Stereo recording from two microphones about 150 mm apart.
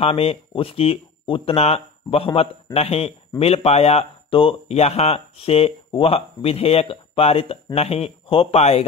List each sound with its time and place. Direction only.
0.0 s speech: 40° left (ahead or behind)